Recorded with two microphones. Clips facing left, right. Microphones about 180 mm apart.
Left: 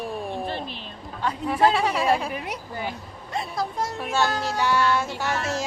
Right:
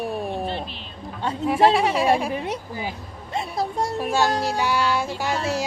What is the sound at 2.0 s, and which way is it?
Speech, 15° right (ahead or behind).